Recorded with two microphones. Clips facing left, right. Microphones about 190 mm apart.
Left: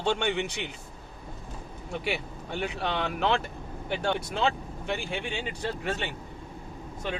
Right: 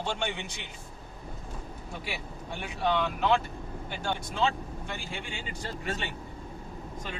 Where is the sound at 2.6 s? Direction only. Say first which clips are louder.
Right 2 dB; 70° left (ahead or behind).